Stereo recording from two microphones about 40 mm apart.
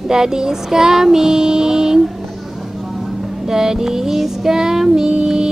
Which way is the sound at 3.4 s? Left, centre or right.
Centre.